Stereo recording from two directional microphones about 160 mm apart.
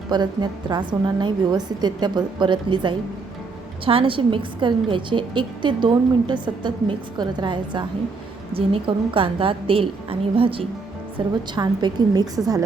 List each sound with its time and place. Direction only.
0.1 s a woman's voice: 25° right (ahead or behind)